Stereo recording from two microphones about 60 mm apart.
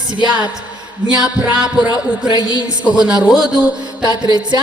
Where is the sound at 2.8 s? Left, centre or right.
Centre.